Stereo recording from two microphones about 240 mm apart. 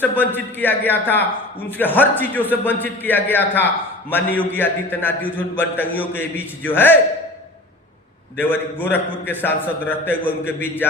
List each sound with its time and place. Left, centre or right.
0.0 s a man's voice: centre
8.4 s a man's voice: centre